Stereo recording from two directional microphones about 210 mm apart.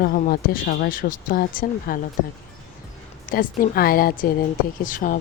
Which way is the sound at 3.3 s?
45° left (ahead or behind).